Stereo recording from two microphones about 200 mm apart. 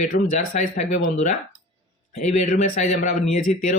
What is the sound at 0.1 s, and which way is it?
Speech, 40° left (ahead or behind).